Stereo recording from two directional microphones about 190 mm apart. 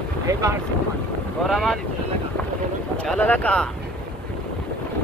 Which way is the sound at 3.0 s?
5° left (ahead or behind).